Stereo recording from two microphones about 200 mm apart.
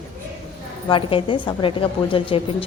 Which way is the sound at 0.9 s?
25° left (ahead or behind).